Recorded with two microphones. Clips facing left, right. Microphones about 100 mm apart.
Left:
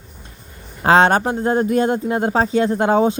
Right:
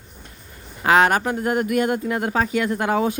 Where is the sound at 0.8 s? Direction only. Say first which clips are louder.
Left 3 dB; 30° left (ahead or behind).